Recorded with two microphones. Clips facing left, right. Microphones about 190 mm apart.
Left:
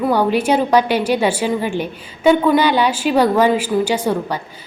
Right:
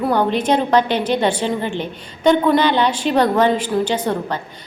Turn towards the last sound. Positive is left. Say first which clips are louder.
# left 2 dB
turn(degrees=10)  # may be behind; listen again after turning